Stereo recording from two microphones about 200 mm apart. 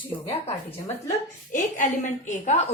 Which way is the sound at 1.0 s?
40° left (ahead or behind).